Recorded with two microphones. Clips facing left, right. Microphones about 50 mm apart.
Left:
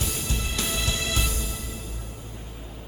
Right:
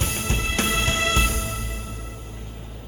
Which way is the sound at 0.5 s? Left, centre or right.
Right.